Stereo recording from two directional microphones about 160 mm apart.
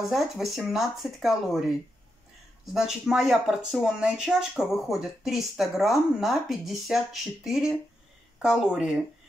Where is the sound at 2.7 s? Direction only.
5° right (ahead or behind).